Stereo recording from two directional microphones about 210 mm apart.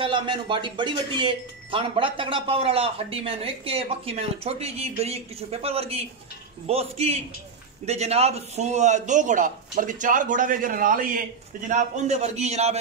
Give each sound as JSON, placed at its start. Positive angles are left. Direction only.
{"t": 0.0, "sound": "a man's voice", "side_deg": -25}